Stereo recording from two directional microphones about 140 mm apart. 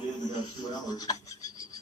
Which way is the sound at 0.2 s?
30° left (ahead or behind).